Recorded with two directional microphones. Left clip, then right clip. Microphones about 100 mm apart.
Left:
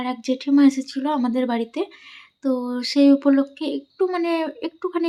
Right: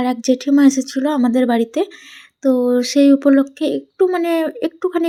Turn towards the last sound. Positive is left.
turn(degrees=-40)  # may be behind; listen again after turning